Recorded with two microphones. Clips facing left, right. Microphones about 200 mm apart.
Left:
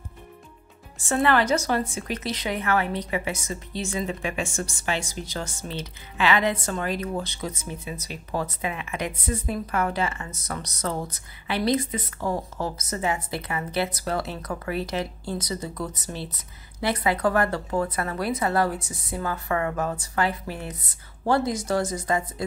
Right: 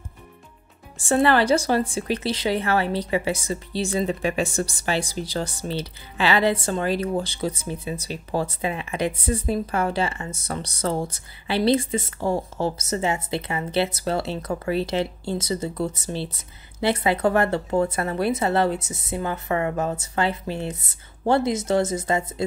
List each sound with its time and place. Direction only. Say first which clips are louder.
0.9 s speech: right 3 dB; 30° right (ahead or behind)